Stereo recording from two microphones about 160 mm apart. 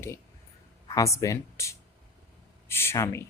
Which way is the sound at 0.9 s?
20° left (ahead or behind).